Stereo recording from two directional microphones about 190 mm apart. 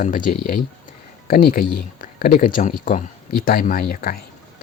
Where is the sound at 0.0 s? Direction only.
45° left (ahead or behind).